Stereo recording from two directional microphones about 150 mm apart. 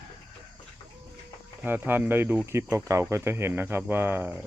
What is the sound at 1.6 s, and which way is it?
Speech, 15° right (ahead or behind).